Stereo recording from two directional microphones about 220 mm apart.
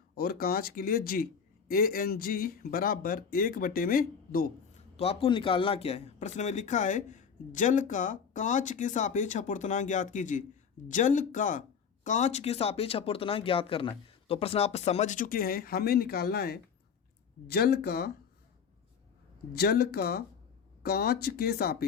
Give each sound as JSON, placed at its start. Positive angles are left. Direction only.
{"t": 0.2, "sound": "a man's voice", "side_deg": 45}
{"t": 4.9, "sound": "a man's voice", "side_deg": 25}
{"t": 19.5, "sound": "speech", "side_deg": 45}